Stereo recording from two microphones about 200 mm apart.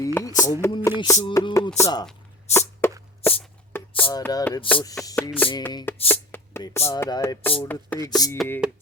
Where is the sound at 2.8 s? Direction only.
10° left (ahead or behind).